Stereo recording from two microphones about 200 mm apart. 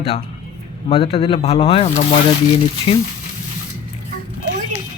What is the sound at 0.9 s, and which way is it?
Speech, 30° left (ahead or behind).